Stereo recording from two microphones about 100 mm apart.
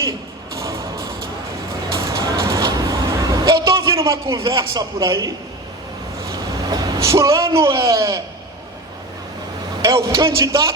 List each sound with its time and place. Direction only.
0.5 s music: 30° right (ahead or behind)
2.0 s a sound: 35° right (ahead or behind)
4.5 s a man's voice: 35° right (ahead or behind)
6.3 s vehicle: 40° right (ahead or behind)
7.8 s a man's voice: 35° right (ahead or behind)
9.8 s a man's voice: 35° right (ahead or behind)